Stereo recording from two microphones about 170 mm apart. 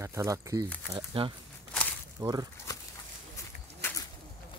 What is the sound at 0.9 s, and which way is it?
Speech, 30° right (ahead or behind).